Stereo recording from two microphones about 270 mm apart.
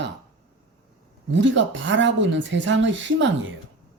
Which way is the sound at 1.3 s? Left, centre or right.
Right.